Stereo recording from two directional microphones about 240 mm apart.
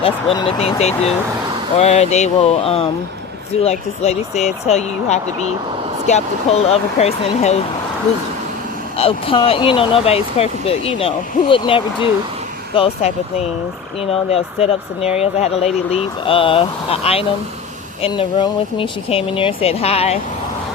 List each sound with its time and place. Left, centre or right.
0.0 s speech: left
9.0 s speech: left